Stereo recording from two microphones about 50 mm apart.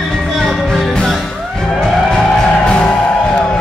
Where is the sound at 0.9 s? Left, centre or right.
Centre.